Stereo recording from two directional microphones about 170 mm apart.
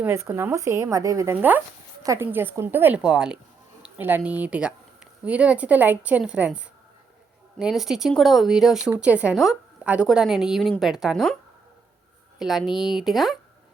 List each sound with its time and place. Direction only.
0.0 s speech: 15° right (ahead or behind)
12.4 s speech: centre (ahead or behind)